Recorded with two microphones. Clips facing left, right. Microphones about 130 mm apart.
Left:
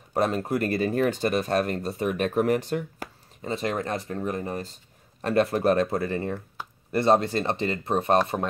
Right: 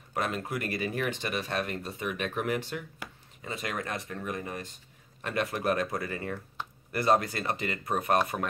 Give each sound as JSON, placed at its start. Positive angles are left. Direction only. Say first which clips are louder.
{"t": 0.1, "sound": "speech", "louder": "left 7 dB", "side_deg": 35}